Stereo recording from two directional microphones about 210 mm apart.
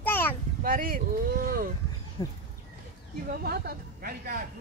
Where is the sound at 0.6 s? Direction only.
40° right (ahead or behind).